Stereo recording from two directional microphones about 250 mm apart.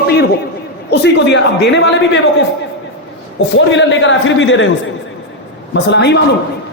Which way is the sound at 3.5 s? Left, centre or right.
Left.